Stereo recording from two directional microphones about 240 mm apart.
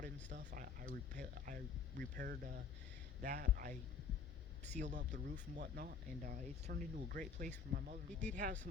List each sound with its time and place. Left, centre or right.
0.0 s speech: right